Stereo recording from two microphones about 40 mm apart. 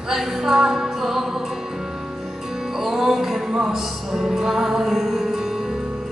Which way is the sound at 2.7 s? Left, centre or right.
Centre.